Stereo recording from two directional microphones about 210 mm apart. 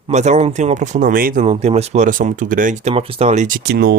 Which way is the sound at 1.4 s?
25° right (ahead or behind).